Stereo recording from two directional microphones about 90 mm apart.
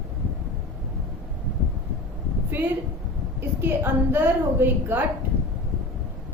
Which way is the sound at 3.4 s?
20° right (ahead or behind).